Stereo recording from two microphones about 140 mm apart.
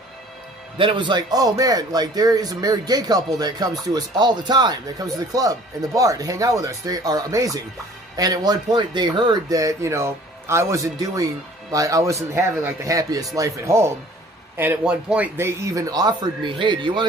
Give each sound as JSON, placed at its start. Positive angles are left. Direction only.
{"t": 0.8, "sound": "speech", "side_deg": -35}
{"t": 15.4, "sound": "speech", "side_deg": -20}